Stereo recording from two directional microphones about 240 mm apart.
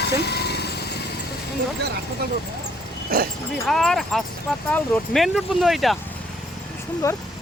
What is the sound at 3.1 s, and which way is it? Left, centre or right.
Speech, right.